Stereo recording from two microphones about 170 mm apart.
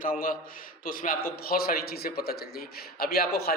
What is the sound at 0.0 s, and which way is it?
A man's voice, 55° left (ahead or behind).